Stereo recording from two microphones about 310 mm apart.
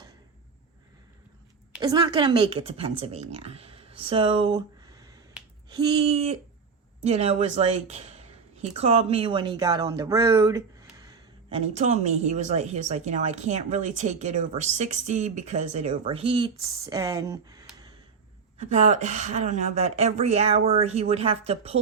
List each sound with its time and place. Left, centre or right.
1.7 s a woman's voice: centre